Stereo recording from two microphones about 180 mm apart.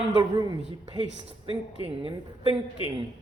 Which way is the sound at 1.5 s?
30° right (ahead or behind).